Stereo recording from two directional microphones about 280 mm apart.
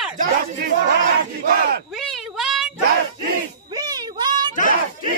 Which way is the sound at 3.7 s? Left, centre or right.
Centre.